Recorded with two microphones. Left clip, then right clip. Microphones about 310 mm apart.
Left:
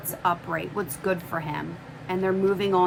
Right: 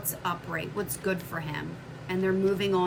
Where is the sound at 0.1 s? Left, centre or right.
Centre.